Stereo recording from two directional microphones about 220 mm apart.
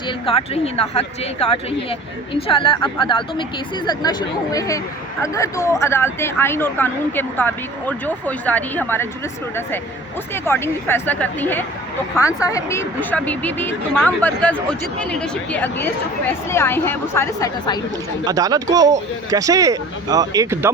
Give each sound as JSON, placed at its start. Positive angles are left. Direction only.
{"t": 0.3, "sound": "speech", "side_deg": 25}
{"t": 10.3, "sound": "speech", "side_deg": 10}
{"t": 18.3, "sound": "speech", "side_deg": -15}